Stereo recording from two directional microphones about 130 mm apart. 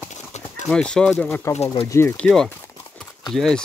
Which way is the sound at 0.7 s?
5° left (ahead or behind).